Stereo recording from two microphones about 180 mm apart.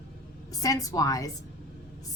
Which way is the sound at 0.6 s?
20° left (ahead or behind).